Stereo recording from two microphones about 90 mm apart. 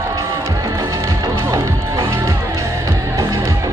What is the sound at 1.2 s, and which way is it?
Music, 35° right (ahead or behind).